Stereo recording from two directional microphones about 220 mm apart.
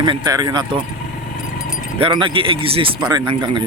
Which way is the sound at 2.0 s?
20° right (ahead or behind).